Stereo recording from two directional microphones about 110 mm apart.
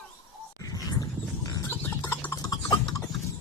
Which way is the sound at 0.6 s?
35° left (ahead or behind).